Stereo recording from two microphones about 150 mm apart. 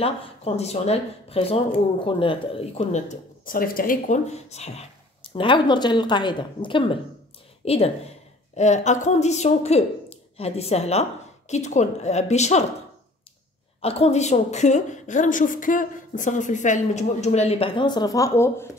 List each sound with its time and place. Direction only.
0.0 s a woman's voice: 45° left (ahead or behind)
2.9 s speech: 60° left (ahead or behind)
4.3 s a woman's voice: 45° left (ahead or behind)
5.3 s a woman's voice: 35° left (ahead or behind)
13.7 s a woman's voice: 40° left (ahead or behind); by 18.7 s 15° left (ahead or behind)